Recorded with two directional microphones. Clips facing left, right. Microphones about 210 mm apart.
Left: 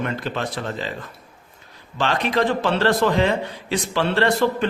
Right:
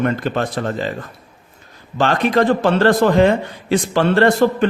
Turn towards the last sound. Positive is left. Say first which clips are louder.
# right 5 dB
turn(degrees=-50)  # may be behind; listen again after turning